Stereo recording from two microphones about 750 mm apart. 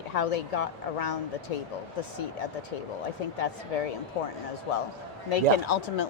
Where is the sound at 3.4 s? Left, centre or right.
Left.